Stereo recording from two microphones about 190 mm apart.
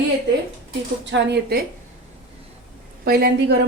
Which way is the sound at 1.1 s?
60° right (ahead or behind).